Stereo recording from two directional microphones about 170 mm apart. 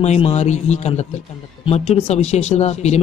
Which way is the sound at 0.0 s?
40° left (ahead or behind).